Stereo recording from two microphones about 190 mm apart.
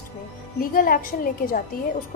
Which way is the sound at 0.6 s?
50° left (ahead or behind).